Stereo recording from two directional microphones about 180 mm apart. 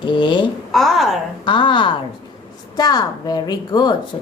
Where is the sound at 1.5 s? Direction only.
25° left (ahead or behind).